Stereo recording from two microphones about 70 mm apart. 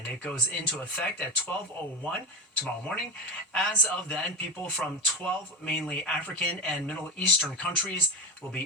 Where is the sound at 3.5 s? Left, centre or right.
Centre.